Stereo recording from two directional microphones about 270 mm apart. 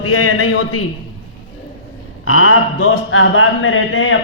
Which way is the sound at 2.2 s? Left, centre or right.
Left.